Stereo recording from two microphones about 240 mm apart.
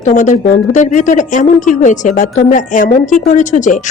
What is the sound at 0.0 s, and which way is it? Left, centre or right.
A woman's voice, left.